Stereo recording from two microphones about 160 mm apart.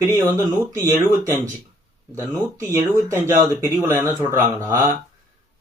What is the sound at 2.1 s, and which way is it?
Speech, 15° right (ahead or behind).